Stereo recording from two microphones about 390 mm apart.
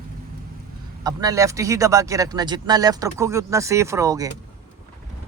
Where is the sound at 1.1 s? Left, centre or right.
Centre.